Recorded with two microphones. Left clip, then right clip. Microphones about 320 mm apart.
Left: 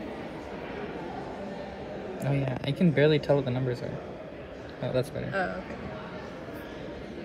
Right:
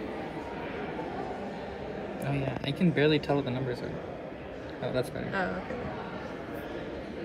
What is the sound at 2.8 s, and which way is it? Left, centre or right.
Speech, centre.